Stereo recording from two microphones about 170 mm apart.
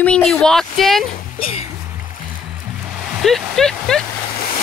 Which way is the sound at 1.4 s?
35° left (ahead or behind).